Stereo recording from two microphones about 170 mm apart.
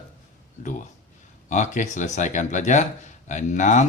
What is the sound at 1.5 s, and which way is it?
Speech, 45° left (ahead or behind).